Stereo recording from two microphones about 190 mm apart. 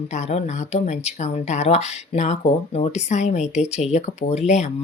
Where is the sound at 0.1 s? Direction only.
35° left (ahead or behind).